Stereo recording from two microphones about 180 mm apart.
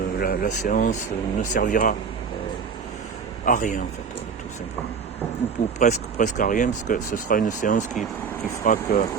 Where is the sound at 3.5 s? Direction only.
45° left (ahead or behind).